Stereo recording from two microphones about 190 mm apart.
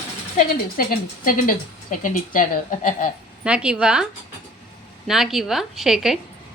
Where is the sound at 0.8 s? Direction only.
50° left (ahead or behind).